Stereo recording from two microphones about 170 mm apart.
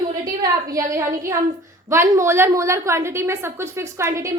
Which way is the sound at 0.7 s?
20° right (ahead or behind).